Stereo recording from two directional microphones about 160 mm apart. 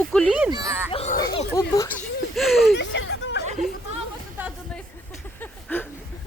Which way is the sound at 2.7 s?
90° left.